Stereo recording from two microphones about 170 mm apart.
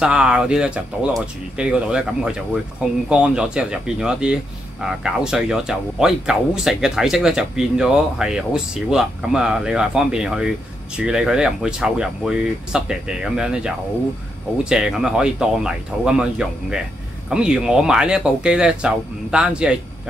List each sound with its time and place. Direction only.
0.0 s speech: 5° right (ahead or behind)